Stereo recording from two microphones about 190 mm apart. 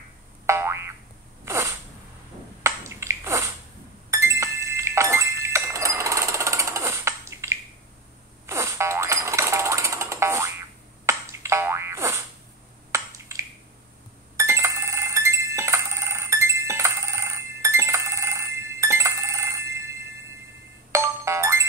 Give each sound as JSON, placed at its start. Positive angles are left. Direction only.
{"t": 0.5, "sound": "boing", "side_deg": -15}
{"t": 1.4, "sound": "sneeze", "side_deg": -15}
{"t": 2.6, "sound": "bathtub", "side_deg": -15}
{"t": 4.1, "sound": "a sound", "side_deg": -15}
{"t": 8.5, "sound": "music", "side_deg": -15}
{"t": 11.1, "sound": "boing", "side_deg": -15}
{"t": 12.9, "sound": "finger snapping", "side_deg": -15}
{"t": 14.3, "sound": "ringtone", "side_deg": -15}
{"t": 20.9, "sound": "music", "side_deg": -15}